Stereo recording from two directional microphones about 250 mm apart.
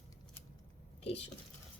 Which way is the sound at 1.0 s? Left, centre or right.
Left.